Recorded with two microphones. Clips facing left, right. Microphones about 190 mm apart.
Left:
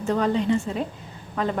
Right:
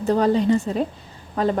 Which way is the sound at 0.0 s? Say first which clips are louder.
Right 4 dB; 35° right (ahead or behind).